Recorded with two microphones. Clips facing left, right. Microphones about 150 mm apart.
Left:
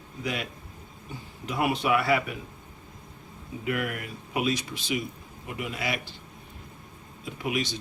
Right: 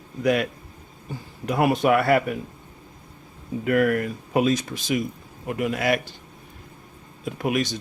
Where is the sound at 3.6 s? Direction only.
45° right (ahead or behind).